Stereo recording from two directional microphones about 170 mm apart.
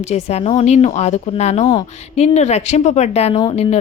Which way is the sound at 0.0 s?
40° left (ahead or behind).